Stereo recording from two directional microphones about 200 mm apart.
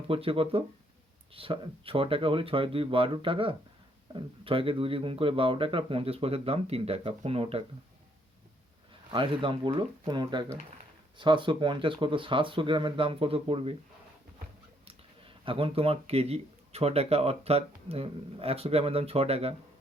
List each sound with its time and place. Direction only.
0.1 s speech: 25° right (ahead or behind)
8.9 s speech: 25° right (ahead or behind)
15.4 s speech: 25° right (ahead or behind)